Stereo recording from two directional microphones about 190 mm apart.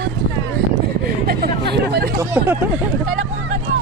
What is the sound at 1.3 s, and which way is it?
Speech, 55° right (ahead or behind).